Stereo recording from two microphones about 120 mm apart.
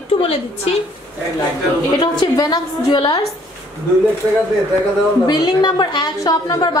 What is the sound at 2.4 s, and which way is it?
Speech, 40° left (ahead or behind).